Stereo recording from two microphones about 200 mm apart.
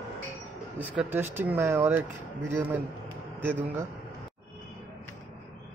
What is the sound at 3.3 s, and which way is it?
Speech, 10° right (ahead or behind).